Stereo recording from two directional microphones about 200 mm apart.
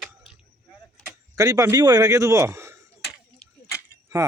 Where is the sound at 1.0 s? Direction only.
15° right (ahead or behind).